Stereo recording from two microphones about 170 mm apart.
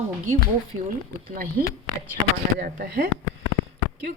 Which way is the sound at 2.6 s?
60° right (ahead or behind).